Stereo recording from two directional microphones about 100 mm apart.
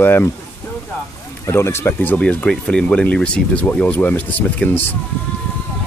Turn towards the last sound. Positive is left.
turn(degrees=20)  # may be behind; listen again after turning